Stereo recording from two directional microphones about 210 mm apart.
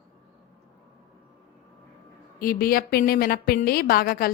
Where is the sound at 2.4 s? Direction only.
45° left (ahead or behind).